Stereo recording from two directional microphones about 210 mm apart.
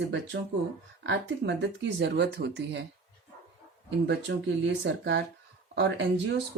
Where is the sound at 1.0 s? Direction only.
55° right (ahead or behind).